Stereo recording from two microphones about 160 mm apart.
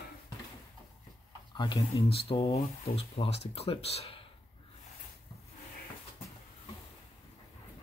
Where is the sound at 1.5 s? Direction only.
30° left (ahead or behind).